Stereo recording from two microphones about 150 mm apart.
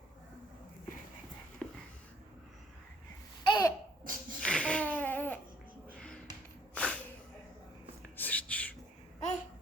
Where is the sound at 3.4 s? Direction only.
30° left (ahead or behind).